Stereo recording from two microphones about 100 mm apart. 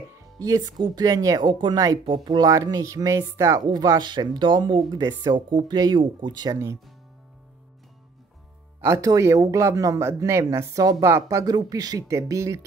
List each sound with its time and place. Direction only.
0.4 s speech: 35° right (ahead or behind)
2.5 s speech: 35° right (ahead or behind)
4.1 s speech: 45° right (ahead or behind)
8.8 s speech: 30° right (ahead or behind)